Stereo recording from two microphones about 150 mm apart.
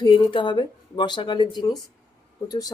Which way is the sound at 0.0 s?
35° left (ahead or behind).